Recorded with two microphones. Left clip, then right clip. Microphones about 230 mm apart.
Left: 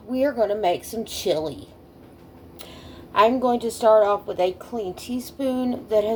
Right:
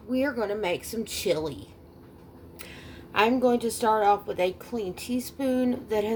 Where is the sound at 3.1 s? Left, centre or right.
Right.